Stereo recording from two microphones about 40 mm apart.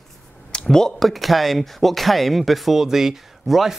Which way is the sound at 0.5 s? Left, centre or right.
Centre.